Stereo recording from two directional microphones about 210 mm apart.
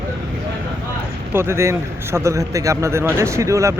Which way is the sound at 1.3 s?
10° right (ahead or behind).